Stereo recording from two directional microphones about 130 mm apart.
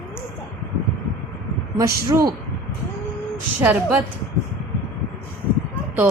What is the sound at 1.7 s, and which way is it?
Speech, 25° right (ahead or behind).